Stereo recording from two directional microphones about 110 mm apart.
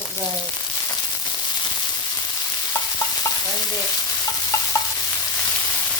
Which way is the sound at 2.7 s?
30° left (ahead or behind).